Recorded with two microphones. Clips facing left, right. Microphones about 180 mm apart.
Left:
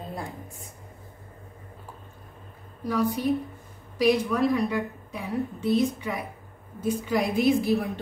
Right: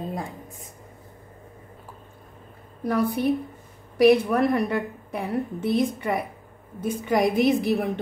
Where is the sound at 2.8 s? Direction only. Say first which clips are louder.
Right 2 dB; 60° right (ahead or behind).